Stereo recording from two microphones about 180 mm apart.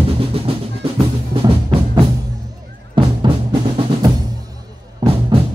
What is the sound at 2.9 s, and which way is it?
Drum, 25° right (ahead or behind).